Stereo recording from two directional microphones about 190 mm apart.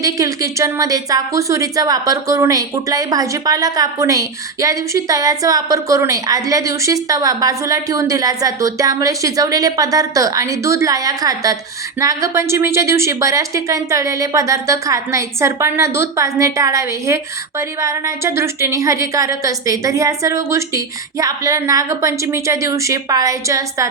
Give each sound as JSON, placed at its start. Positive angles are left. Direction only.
{"t": 0.0, "sound": "a woman's voice", "side_deg": -15}